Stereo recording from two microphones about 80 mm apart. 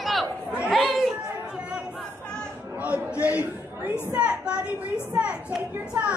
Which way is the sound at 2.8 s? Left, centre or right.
Centre.